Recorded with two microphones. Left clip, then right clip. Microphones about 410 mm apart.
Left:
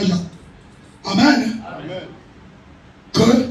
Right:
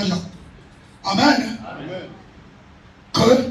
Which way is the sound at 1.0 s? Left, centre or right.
Right.